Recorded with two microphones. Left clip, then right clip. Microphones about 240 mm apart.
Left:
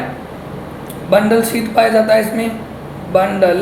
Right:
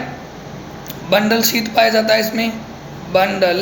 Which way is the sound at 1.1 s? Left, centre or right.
Centre.